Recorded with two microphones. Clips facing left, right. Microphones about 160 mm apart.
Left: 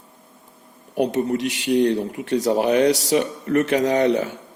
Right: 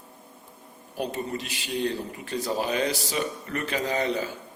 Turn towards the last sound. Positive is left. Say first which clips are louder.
# left 8 dB
turn(degrees=75)  # may be behind; listen again after turning